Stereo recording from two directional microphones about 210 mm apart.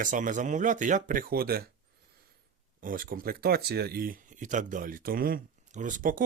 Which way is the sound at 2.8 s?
40° right (ahead or behind).